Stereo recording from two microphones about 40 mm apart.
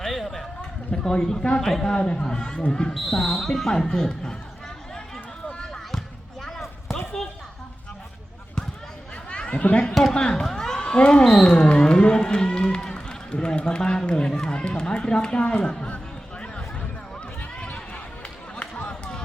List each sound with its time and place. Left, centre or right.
0.0 s a sound: centre
0.9 s speech: left
2.9 s speech: centre
3.7 s speech: centre
6.4 s a sound: centre
9.3 s chatter: left
10.0 s speech: centre
10.4 s a sound: centre
11.2 s speech: centre
18.9 s run: left